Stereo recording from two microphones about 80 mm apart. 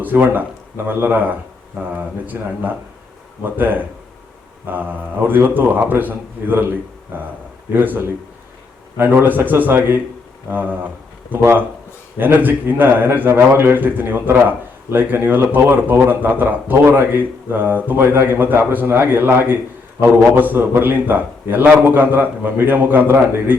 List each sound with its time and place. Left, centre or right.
0.0 s a man's voice: right